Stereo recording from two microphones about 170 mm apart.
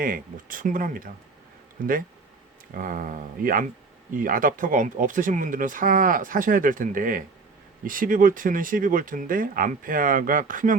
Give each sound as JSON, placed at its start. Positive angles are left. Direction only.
{"t": 0.0, "sound": "speech", "side_deg": -55}